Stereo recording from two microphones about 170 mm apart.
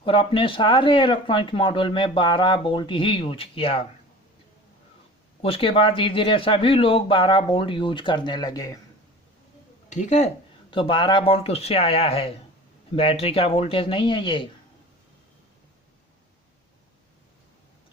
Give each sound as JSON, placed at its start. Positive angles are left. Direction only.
{"t": 0.0, "sound": "speech", "side_deg": 30}
{"t": 5.4, "sound": "speech", "side_deg": 35}
{"t": 9.9, "sound": "speech", "side_deg": 45}
{"t": 10.7, "sound": "speech", "side_deg": 30}